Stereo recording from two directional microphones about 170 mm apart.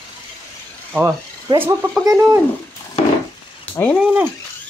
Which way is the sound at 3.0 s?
40° left (ahead or behind).